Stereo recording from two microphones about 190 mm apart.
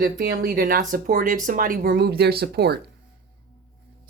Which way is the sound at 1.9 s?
60° right (ahead or behind).